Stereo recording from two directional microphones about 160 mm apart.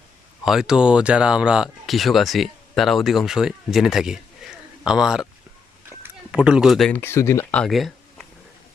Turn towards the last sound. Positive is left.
turn(degrees=0)  # may be behind; listen again after turning